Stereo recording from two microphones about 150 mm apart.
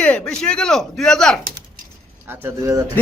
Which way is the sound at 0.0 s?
10° left (ahead or behind).